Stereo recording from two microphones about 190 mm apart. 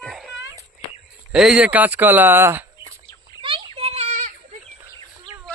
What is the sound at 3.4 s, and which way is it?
Children playing, 25° right (ahead or behind).